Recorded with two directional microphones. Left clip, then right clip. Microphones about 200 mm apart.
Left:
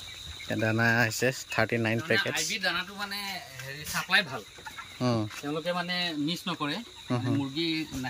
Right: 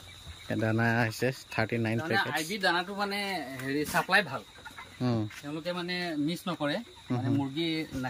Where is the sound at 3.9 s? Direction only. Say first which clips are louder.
Right 3 dB; 40° right (ahead or behind).